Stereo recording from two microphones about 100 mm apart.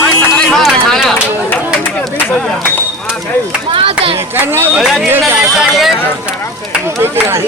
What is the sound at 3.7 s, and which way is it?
Speech, 65° right (ahead or behind).